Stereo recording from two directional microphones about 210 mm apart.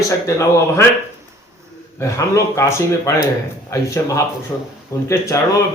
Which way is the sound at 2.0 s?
15° left (ahead or behind).